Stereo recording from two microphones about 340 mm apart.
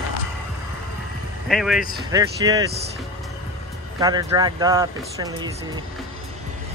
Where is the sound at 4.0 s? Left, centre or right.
Centre.